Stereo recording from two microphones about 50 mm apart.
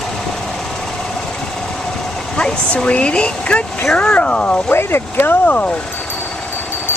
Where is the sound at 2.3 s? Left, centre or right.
Centre.